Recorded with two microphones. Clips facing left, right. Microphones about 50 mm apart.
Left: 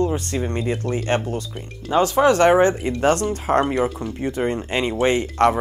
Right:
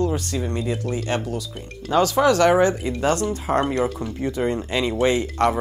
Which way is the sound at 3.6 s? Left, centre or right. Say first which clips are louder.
Left 1 dB; centre.